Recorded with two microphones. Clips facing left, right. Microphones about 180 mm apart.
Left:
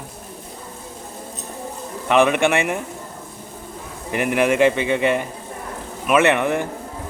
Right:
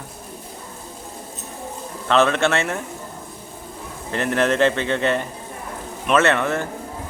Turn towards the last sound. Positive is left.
turn(degrees=15)  # may be behind; listen again after turning